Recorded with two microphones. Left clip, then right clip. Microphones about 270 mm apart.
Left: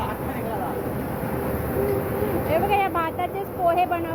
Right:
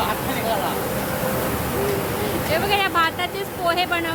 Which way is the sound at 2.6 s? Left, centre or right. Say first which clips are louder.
Right 3 dB; centre.